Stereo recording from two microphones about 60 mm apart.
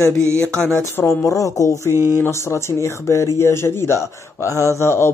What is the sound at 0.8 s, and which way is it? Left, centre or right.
Speech, left.